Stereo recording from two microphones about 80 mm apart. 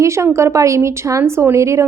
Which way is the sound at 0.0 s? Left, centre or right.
Right.